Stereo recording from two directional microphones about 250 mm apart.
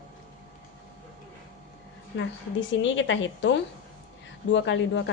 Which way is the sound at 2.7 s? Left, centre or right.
Left.